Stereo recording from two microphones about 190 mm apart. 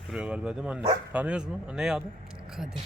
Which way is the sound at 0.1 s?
5° right (ahead or behind).